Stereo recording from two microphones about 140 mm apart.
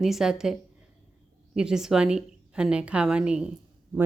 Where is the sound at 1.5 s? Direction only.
5° right (ahead or behind).